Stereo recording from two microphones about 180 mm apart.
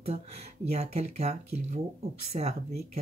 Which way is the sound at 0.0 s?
35° right (ahead or behind).